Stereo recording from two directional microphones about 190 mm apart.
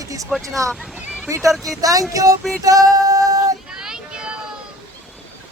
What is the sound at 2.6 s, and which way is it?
Female singing, 20° right (ahead or behind).